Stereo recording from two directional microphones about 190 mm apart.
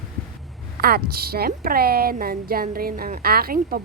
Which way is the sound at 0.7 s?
50° right (ahead or behind).